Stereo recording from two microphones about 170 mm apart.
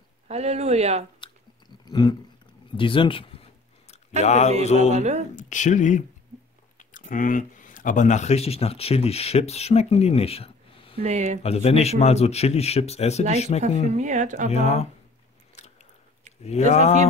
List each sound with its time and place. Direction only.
0.3 s speech: 40° right (ahead or behind)
1.9 s a sound: 25° left (ahead or behind)
2.8 s speech: 30° left (ahead or behind)
4.2 s speech: 40° left (ahead or behind)
4.9 s speech: 40° right (ahead or behind)
5.3 s speech: 45° left (ahead or behind)
11.0 s speech: 40° right (ahead or behind)
11.4 s speech: 40° left (ahead or behind)
13.9 s speech: 45° right (ahead or behind)
14.5 s speech: 40° left (ahead or behind)
16.4 s speech: 40° left (ahead or behind)